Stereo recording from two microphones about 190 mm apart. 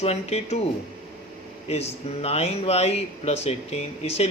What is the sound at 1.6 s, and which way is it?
Speech, 35° left (ahead or behind).